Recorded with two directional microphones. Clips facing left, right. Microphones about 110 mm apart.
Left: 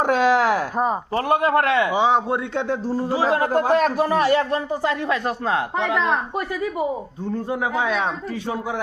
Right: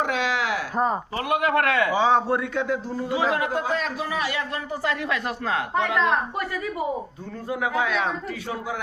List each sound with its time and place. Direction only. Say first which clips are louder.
0.0 s a sound: left 7 dB; 45° left (ahead or behind)
1.1 s a woman's voice: left 7 dB; 30° left (ahead or behind); by 2.4 s 15° left (ahead or behind)
2.6 s speech: left 3 dB; 30° left (ahead or behind)
3.6 s a man's voice: left 8 dB; 50° left (ahead or behind)
4.7 s a woman's voice: left 4 dB; 25° left (ahead or behind)
7.5 s a woman's voice: even; 25° left (ahead or behind)